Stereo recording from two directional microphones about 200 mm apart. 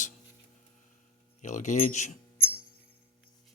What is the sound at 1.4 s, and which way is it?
Speech, 35° left (ahead or behind).